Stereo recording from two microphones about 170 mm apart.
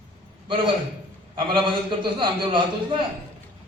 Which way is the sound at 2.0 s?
30° right (ahead or behind).